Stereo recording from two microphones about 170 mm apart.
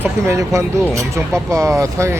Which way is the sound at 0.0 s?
15° right (ahead or behind).